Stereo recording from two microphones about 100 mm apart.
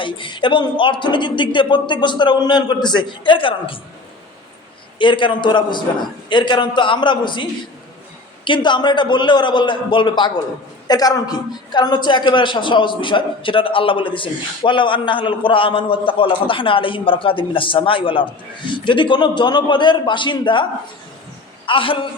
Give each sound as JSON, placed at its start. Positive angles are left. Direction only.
{"t": 0.0, "sound": "speech", "side_deg": 55}
{"t": 4.9, "sound": "speech", "side_deg": 55}
{"t": 8.4, "sound": "a woman's voice", "side_deg": 55}
{"t": 21.7, "sound": "a woman's voice", "side_deg": 60}